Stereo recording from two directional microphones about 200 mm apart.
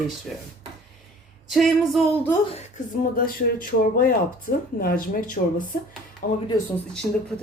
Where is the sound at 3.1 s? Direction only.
45° left (ahead or behind).